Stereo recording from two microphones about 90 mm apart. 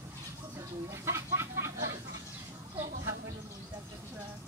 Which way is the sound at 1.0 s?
30° right (ahead or behind).